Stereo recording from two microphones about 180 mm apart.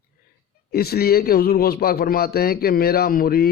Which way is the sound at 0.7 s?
60° left (ahead or behind).